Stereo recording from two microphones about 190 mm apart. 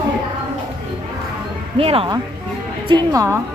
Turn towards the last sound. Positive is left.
turn(degrees=-15)  # may be behind; listen again after turning